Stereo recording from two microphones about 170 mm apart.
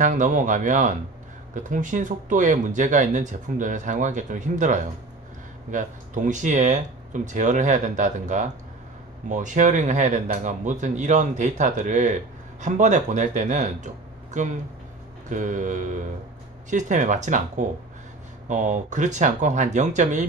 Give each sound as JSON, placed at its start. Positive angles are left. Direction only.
{"t": 0.0, "sound": "a man's voice", "side_deg": -50}